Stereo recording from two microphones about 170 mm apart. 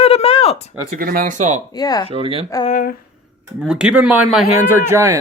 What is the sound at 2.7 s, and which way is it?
Speech, 50° left (ahead or behind).